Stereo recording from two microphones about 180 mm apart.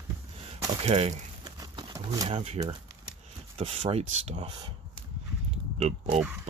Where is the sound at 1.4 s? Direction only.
20° right (ahead or behind).